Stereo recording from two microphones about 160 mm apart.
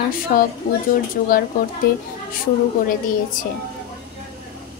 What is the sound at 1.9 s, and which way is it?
Speech, 70° left (ahead or behind).